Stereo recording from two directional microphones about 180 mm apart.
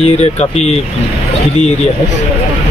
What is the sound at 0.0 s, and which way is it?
Speech, 35° left (ahead or behind).